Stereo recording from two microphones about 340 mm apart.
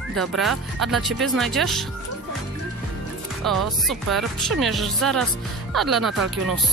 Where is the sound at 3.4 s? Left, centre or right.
Centre.